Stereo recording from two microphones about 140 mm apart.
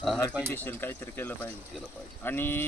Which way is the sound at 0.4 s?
15° left (ahead or behind).